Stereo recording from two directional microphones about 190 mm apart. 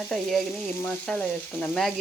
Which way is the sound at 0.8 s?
10° left (ahead or behind).